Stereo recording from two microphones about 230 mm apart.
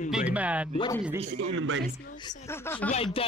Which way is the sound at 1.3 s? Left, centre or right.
Right.